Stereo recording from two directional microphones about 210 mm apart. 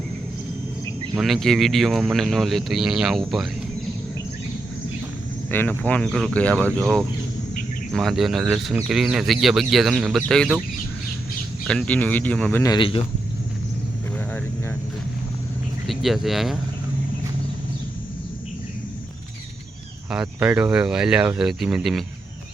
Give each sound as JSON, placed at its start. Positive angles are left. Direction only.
{"t": 1.2, "sound": "speech", "side_deg": 0}
{"t": 5.5, "sound": "speech", "side_deg": 10}
{"t": 11.6, "sound": "speech", "side_deg": 5}
{"t": 12.7, "sound": "speech", "side_deg": 25}
{"t": 15.9, "sound": "speech", "side_deg": 0}
{"t": 20.1, "sound": "speech", "side_deg": -5}